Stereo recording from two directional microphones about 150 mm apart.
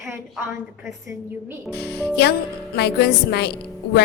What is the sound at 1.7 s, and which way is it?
A woman's voice, 90° left.